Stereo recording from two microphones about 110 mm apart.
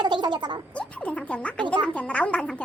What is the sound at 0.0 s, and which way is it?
Gargling, 45° right (ahead or behind).